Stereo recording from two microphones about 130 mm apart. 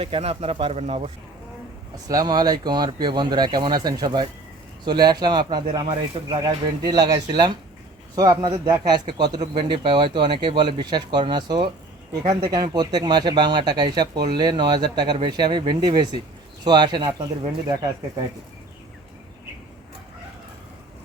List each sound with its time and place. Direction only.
0.0 s speech: 45° right (ahead or behind)
2.0 s speech: 30° right (ahead or behind)